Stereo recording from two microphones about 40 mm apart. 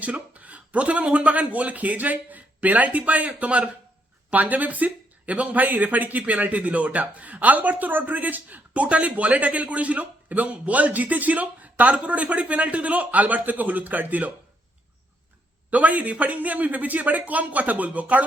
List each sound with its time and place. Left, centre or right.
0.0 s a man's voice: right
4.3 s speech: right
15.7 s speech: right